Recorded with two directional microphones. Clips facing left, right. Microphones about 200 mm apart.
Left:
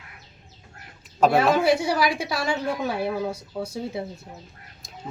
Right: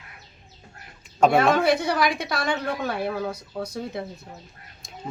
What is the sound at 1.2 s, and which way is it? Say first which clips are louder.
A woman's voice: even; 5° left (ahead or behind).